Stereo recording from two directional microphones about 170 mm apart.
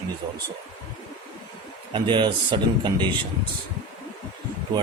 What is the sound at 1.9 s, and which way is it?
A man's voice, 30° right (ahead or behind).